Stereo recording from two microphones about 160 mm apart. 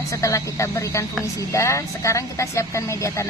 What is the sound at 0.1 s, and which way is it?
Speech, 20° left (ahead or behind).